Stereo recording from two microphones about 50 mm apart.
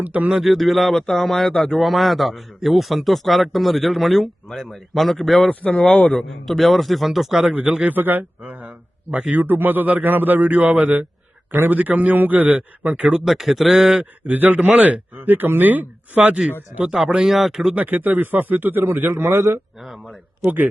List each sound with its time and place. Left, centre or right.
0.0 s speech: right
0.4 s a man's voice: centre
5.5 s a man's voice: left
6.5 s a man's voice: centre
7.5 s speech: right
7.9 s speech: right
13.2 s a man's voice: centre
14.0 s speech: right
16.9 s speech: centre
17.7 s speech: right
19.1 s a man's voice: right